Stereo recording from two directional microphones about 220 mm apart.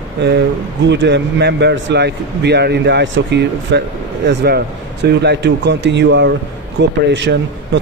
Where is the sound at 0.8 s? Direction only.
55° right (ahead or behind).